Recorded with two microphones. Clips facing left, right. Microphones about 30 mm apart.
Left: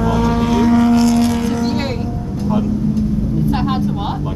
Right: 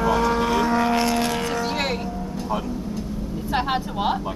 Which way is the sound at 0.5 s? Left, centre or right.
Right.